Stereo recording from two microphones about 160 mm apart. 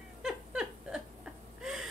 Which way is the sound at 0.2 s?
5° right (ahead or behind).